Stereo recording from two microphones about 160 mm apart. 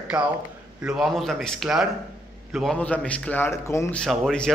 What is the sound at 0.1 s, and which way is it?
A man's voice, 5° right (ahead or behind).